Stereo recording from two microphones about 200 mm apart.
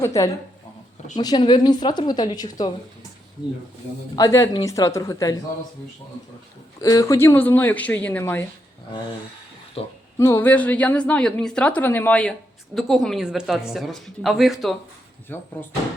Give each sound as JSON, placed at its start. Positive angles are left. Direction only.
{"t": 0.0, "sound": "speech", "side_deg": 15}
{"t": 4.1, "sound": "speech", "side_deg": 15}
{"t": 6.8, "sound": "speech", "side_deg": 15}
{"t": 9.8, "sound": "speech", "side_deg": 30}
{"t": 10.2, "sound": "a woman's voice", "side_deg": 10}
{"t": 15.3, "sound": "speech", "side_deg": 10}